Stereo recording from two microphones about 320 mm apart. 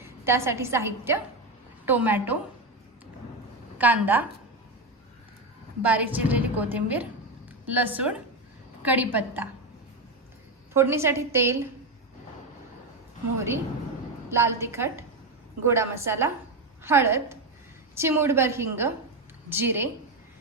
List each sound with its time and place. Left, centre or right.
0.0 s a woman's voice: centre
3.8 s a woman's voice: centre
5.8 s a woman's voice: centre
10.8 s a woman's voice: centre
14.3 s a woman's voice: centre